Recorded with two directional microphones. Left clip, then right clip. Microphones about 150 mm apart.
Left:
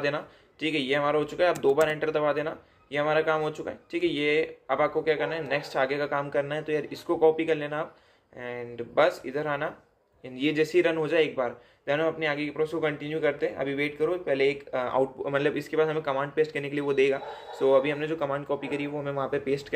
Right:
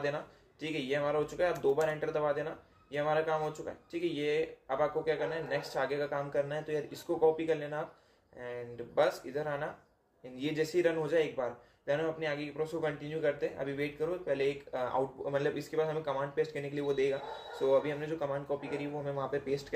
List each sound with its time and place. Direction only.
0.0 s a man's voice: 15° left (ahead or behind)